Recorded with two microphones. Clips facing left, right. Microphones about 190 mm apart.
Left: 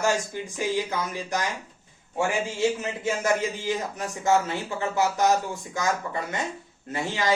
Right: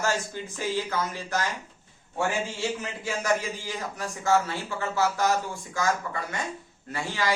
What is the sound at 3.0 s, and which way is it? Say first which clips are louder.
A man's voice: left 3 dB; 20° left (ahead or behind).